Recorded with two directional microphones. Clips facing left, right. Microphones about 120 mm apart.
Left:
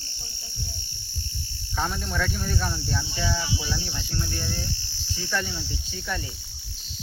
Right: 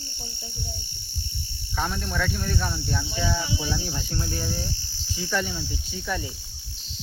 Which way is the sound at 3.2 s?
20° right (ahead or behind).